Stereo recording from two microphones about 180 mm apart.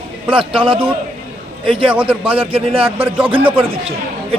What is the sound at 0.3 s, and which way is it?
A man's voice, 30° right (ahead or behind).